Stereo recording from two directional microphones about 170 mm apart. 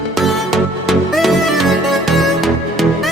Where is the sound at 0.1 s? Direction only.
Centre (ahead or behind).